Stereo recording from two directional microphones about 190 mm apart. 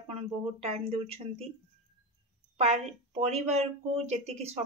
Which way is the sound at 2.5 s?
35° right (ahead or behind).